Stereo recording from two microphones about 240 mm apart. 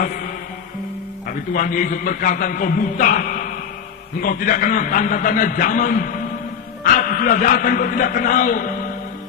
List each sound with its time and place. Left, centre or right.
1.3 s a man's voice: left